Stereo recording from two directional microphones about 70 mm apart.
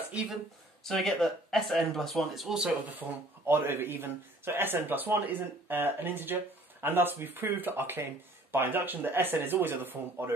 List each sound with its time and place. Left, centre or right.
0.8 s speech: centre
3.0 s speech: right
3.4 s speech: right